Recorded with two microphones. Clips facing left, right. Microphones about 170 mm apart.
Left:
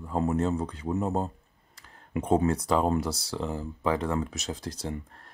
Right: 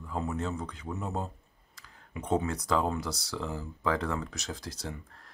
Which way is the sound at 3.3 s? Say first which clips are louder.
Left 3 dB; 15° left (ahead or behind).